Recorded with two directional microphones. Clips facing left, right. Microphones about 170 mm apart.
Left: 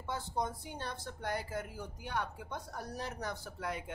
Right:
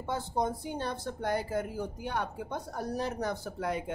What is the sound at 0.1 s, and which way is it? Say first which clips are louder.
Speech: right 6 dB; 25° right (ahead or behind).